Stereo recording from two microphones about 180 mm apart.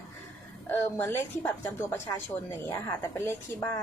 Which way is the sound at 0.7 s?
15° left (ahead or behind).